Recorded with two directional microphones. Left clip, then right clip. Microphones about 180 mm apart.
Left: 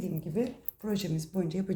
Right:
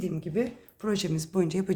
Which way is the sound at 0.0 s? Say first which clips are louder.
Right 3 dB; 40° right (ahead or behind).